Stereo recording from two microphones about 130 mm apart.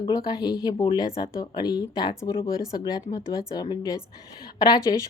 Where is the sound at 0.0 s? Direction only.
30° left (ahead or behind).